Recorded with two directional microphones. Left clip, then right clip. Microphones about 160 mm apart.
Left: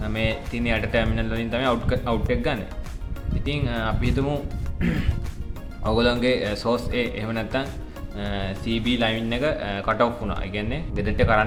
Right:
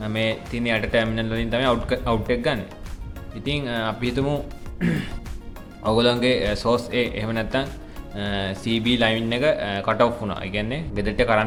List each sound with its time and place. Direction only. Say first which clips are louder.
0.0 s speech: right 2 dB; 20° right (ahead or behind)